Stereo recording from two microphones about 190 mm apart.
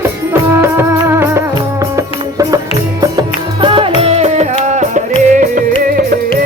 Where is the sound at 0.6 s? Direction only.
15° right (ahead or behind).